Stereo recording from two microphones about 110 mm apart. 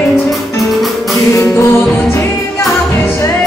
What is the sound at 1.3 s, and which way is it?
Music, 25° left (ahead or behind).